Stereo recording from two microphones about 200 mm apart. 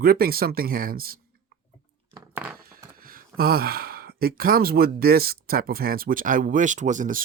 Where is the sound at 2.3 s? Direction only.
10° right (ahead or behind).